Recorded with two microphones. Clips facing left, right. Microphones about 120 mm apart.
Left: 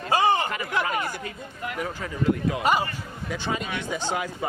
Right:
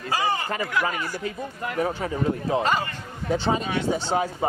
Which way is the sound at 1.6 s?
35° right (ahead or behind).